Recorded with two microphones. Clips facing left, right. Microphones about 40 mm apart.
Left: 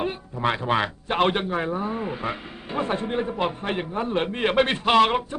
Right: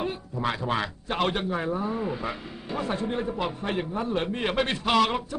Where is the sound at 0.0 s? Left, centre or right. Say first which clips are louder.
Left 3 dB; left.